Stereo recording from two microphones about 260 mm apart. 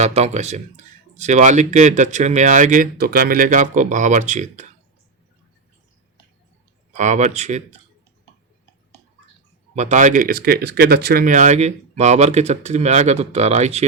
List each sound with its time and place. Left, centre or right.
0.0 s speech: right
6.9 s speech: right
9.7 s speech: right